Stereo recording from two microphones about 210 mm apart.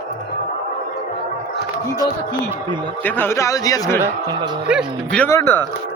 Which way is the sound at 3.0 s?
10° left (ahead or behind).